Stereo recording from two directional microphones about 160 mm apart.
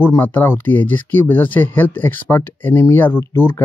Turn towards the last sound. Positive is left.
turn(degrees=15)  # may be behind; listen again after turning